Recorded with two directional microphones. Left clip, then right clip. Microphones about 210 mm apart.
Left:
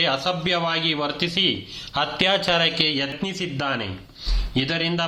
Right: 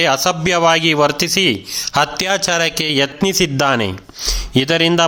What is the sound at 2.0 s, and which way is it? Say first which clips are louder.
A man's voice: right 5 dB; 30° right (ahead or behind).